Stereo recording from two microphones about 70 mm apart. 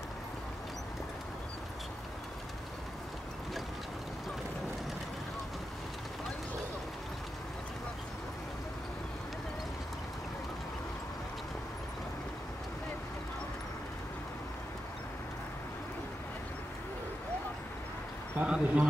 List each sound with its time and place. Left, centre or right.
18.4 s speech: centre